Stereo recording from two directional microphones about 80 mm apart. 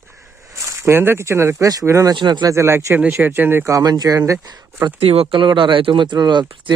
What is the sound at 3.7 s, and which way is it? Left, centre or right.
Speech, right.